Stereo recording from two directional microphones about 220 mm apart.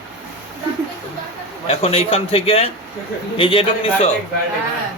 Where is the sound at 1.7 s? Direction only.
25° left (ahead or behind).